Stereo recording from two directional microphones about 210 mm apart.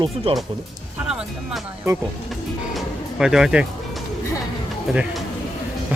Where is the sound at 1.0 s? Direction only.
5° right (ahead or behind).